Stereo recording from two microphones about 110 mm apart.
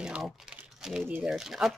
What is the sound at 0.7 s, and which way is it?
Typing, 5° right (ahead or behind).